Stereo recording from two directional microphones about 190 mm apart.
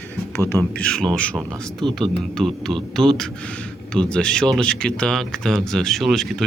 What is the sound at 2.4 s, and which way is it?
Speech, centre (ahead or behind).